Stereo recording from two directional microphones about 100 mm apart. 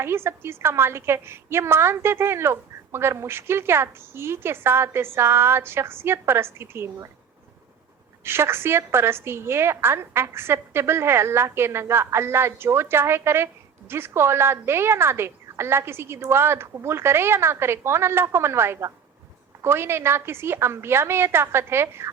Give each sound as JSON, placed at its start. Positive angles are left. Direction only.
{"t": 0.0, "sound": "a woman's voice", "side_deg": -25}
{"t": 8.2, "sound": "a woman's voice", "side_deg": -25}